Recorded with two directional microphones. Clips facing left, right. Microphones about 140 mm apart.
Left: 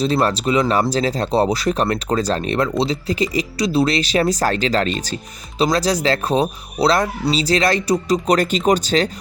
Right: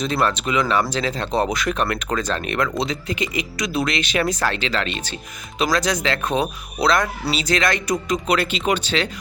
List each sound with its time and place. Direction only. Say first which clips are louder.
0.0 s speech: left 4 dB; 35° left (ahead or behind)